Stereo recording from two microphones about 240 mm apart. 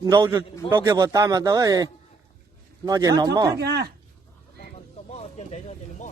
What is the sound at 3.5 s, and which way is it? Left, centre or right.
Speech, right.